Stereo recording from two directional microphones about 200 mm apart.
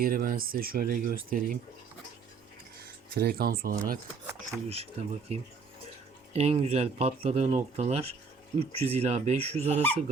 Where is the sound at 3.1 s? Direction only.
50° right (ahead or behind).